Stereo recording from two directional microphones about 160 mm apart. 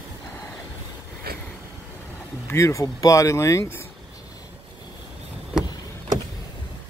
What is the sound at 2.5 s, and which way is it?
Speech, 20° left (ahead or behind).